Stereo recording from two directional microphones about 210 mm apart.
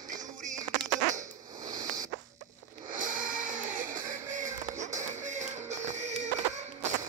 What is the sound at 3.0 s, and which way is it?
Music, 40° right (ahead or behind).